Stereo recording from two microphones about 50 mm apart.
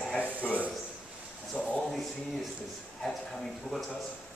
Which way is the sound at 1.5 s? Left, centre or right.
Left.